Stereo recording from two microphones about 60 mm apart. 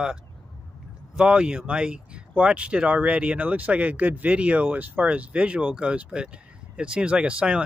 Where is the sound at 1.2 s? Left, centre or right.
Centre.